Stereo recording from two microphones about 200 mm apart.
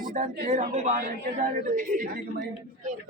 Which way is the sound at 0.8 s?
40° right (ahead or behind).